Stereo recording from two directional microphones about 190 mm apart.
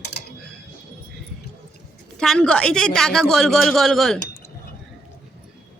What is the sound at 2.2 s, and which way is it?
A man's voice, 5° left (ahead or behind).